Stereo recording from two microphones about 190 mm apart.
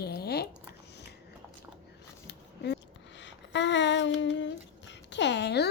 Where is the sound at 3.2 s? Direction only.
70° left (ahead or behind).